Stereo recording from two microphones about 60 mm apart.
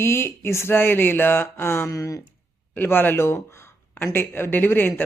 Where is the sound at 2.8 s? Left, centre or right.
Left.